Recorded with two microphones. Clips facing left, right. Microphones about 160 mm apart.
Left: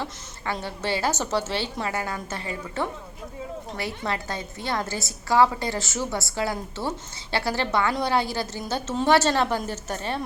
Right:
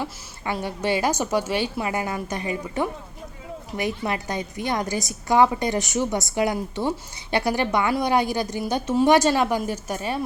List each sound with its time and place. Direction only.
0.0 s a woman's voice: 15° right (ahead or behind)